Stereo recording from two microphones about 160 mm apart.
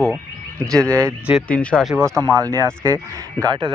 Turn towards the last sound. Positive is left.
turn(degrees=-25)  # may be behind; listen again after turning